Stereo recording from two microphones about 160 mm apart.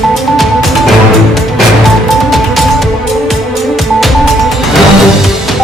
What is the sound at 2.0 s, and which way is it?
Music, centre (ahead or behind).